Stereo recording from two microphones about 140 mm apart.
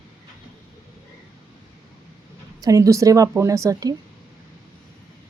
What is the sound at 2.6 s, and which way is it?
Speech, 25° right (ahead or behind).